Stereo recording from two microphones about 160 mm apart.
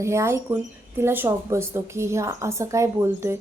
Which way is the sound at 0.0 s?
15° right (ahead or behind).